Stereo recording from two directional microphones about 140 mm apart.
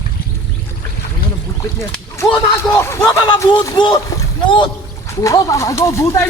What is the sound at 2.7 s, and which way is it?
Speech, 20° left (ahead or behind).